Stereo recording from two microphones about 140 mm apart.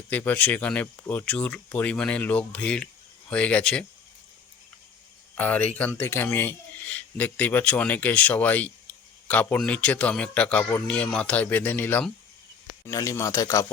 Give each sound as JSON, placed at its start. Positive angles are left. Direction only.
{"t": 0.1, "sound": "speech", "side_deg": 10}
{"t": 5.3, "sound": "speech", "side_deg": 10}